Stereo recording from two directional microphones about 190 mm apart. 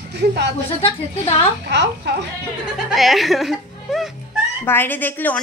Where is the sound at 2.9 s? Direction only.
Centre (ahead or behind).